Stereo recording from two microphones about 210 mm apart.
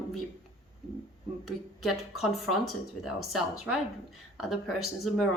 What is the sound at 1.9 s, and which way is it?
Speech, 90° left.